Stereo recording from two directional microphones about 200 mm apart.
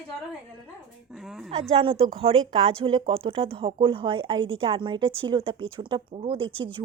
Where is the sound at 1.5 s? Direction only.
30° right (ahead or behind).